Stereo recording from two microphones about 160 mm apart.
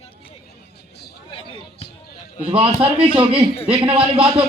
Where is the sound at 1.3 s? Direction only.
35° left (ahead or behind).